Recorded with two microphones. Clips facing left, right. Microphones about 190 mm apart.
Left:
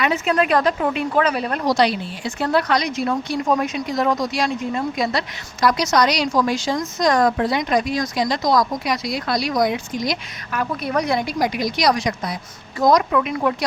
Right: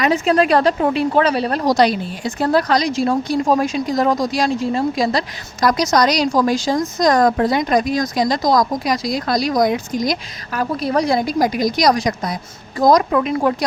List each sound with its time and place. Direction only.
0.0 s speech: 35° right (ahead or behind)